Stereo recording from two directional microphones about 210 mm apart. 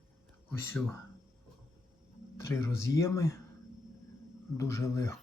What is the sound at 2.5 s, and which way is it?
Speech, 10° left (ahead or behind).